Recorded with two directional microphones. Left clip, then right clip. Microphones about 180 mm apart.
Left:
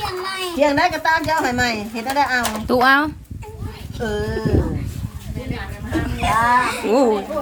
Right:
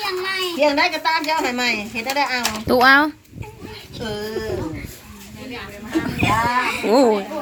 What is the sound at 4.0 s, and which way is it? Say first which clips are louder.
Speech: left 4 dB; 10° left (ahead or behind).